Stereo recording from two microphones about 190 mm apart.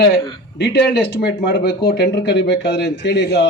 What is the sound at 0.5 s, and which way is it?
Speech, 60° left (ahead or behind).